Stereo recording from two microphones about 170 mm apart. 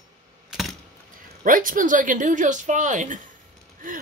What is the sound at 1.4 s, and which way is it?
Speech, 55° right (ahead or behind).